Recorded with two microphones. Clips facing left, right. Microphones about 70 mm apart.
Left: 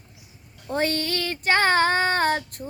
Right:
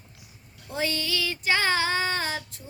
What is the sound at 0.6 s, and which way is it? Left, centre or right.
Child singing, left.